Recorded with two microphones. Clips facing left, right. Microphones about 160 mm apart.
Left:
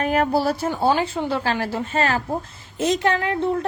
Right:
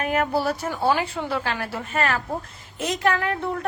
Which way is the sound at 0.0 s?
35° left (ahead or behind).